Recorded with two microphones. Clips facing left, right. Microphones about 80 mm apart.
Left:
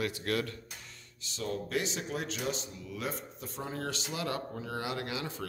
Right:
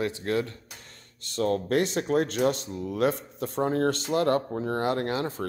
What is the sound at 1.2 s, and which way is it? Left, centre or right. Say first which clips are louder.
Speech: right 10 dB; right.